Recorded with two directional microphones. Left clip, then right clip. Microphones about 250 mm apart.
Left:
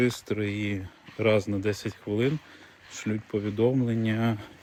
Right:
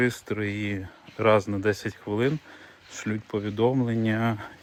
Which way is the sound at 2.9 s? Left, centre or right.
Centre.